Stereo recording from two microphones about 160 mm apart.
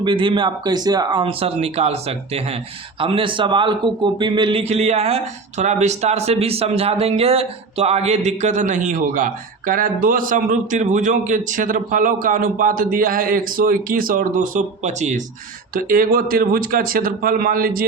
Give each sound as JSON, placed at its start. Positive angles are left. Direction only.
{"t": 0.0, "sound": "speech", "side_deg": -30}
{"t": 1.2, "sound": "a man's voice", "side_deg": -35}
{"t": 15.7, "sound": "speech", "side_deg": -65}